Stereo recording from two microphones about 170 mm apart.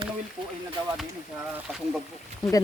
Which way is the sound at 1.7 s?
Centre (ahead or behind).